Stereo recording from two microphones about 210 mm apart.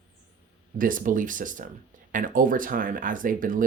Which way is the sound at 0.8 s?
40° right (ahead or behind).